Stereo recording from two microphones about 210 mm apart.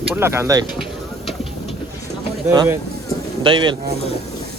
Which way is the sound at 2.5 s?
15° right (ahead or behind).